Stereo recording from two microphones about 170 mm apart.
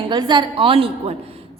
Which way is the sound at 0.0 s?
25° right (ahead or behind).